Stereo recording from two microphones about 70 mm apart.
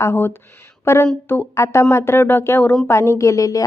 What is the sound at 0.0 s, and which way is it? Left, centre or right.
A woman's voice, left.